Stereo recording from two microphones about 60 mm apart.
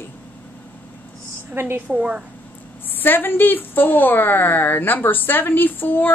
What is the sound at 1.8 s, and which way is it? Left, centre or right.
Speech, centre.